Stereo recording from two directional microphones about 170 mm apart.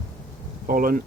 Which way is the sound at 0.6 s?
55° right (ahead or behind).